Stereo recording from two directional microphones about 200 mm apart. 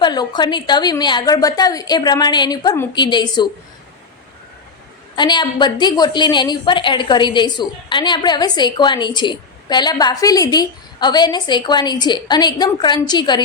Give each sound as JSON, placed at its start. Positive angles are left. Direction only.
{"t": 0.0, "sound": "a woman's voice", "side_deg": 20}
{"t": 5.1, "sound": "a woman's voice", "side_deg": 20}